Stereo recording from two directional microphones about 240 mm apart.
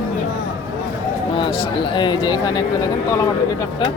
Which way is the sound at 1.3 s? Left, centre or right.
Left.